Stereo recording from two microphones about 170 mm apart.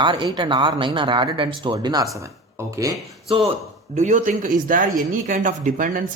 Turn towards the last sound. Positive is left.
turn(degrees=-50)  # may be behind; listen again after turning